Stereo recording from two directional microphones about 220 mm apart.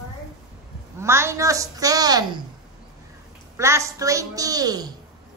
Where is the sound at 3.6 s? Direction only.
15° right (ahead or behind).